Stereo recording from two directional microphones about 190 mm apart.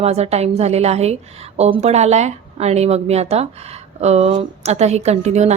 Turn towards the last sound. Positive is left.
turn(degrees=-35)  # may be behind; listen again after turning